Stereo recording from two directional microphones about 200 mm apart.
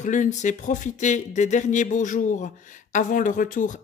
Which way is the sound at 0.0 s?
40° left (ahead or behind).